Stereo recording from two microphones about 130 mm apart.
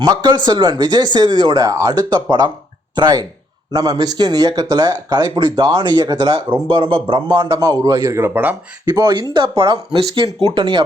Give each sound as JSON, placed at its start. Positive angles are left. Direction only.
{"t": 0.0, "sound": "a man's voice", "side_deg": -35}
{"t": 6.7, "sound": "a man's voice", "side_deg": -40}
{"t": 9.0, "sound": "speech", "side_deg": -35}